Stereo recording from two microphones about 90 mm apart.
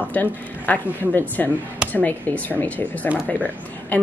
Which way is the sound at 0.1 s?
20° left (ahead or behind).